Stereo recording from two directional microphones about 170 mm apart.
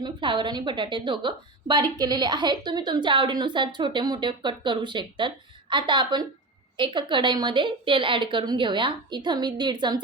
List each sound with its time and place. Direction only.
0.0 s a woman's voice: 30° right (ahead or behind)